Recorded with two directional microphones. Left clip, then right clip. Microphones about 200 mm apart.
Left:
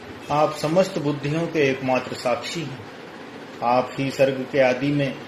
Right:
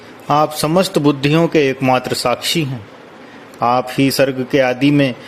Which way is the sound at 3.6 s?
60° right (ahead or behind).